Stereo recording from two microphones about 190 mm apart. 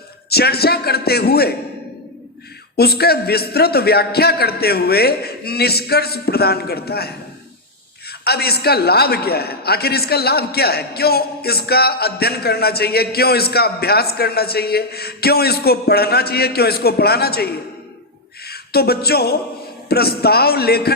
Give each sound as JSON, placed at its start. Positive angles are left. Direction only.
{"t": 0.3, "sound": "a man's voice", "side_deg": 55}
{"t": 2.7, "sound": "a man's voice", "side_deg": 55}
{"t": 8.2, "sound": "a man's voice", "side_deg": 55}
{"t": 18.4, "sound": "a sound", "side_deg": 55}
{"t": 19.9, "sound": "a man's voice", "side_deg": 55}